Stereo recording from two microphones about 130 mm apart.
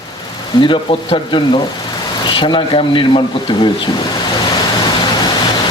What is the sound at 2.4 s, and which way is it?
Speech, 40° left (ahead or behind).